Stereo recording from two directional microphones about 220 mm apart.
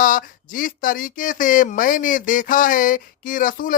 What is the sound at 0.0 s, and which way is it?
Speech, 40° left (ahead or behind).